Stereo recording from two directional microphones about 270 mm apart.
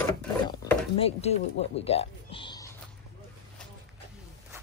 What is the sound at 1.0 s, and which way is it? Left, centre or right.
Speech, left.